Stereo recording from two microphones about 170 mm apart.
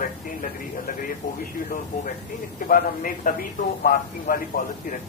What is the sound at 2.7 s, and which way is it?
Speech, 55° left (ahead or behind).